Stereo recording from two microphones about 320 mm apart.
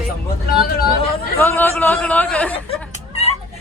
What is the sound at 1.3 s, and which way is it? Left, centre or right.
A woman's voice, centre.